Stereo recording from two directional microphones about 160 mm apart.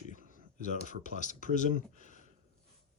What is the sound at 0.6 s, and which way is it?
Speech, 50° left (ahead or behind).